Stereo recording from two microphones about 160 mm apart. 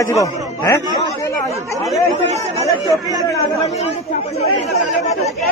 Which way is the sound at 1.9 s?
45° right (ahead or behind).